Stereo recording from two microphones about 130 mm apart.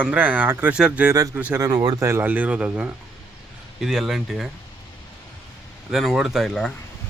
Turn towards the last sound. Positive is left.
turn(degrees=0)  # may be behind; listen again after turning